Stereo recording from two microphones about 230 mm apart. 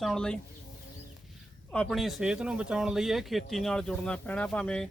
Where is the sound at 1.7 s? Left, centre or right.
Centre.